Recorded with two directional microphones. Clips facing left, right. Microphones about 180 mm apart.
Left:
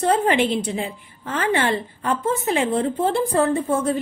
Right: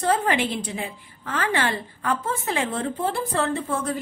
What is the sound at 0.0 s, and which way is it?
A woman's voice, 25° left (ahead or behind).